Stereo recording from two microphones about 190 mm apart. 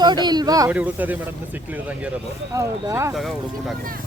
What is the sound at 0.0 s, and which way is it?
Speech, 20° right (ahead or behind).